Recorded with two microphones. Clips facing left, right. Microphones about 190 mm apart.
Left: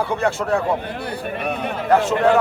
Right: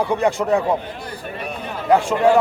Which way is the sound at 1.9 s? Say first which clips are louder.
Right 1 dB; 10° right (ahead or behind).